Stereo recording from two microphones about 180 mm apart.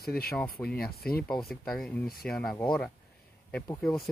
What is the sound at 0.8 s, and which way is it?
Speech, 60° left (ahead or behind).